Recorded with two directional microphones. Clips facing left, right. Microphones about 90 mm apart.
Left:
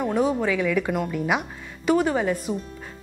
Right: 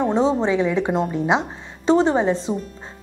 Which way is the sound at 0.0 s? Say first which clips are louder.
Right 4 dB; 25° right (ahead or behind).